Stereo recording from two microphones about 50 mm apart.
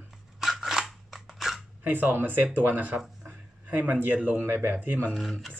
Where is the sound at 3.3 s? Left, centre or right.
Right.